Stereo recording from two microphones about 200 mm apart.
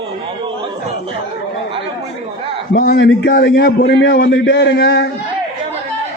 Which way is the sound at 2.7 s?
50° left (ahead or behind).